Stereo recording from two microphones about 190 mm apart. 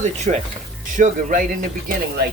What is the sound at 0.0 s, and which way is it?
Speech, 40° right (ahead or behind).